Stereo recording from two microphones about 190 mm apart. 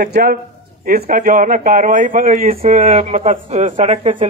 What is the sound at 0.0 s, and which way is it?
A man's voice, 55° right (ahead or behind).